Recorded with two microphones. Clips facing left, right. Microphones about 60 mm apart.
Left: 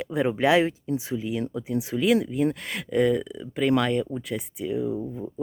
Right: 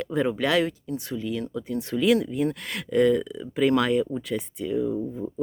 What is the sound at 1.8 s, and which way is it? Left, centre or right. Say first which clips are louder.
Speech: right 1 dB; centre.